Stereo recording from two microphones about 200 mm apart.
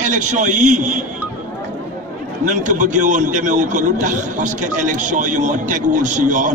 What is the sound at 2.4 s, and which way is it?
A man's voice, 40° right (ahead or behind).